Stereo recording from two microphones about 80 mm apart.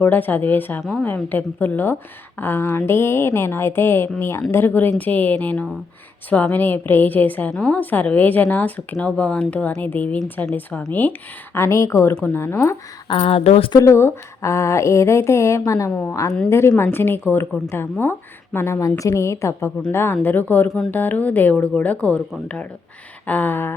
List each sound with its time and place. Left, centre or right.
0.0 s speech: left
0.8 s a woman's voice: centre
1.0 s a woman's voice: left
11.5 s a woman's voice: left
12.1 s speech: left
12.4 s a woman's voice: left
13.1 s speech: left
13.7 s a woman's voice: left
15.9 s speech: left
16.5 s a woman's voice: left
23.2 s speech: left